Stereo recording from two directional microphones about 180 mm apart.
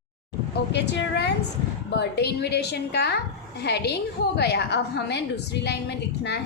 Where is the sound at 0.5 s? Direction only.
70° left (ahead or behind).